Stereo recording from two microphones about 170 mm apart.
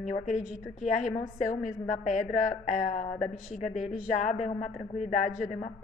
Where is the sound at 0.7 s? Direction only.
45° left (ahead or behind).